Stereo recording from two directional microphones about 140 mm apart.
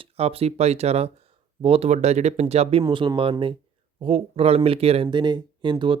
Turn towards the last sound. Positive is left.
turn(degrees=-35)  # may be behind; listen again after turning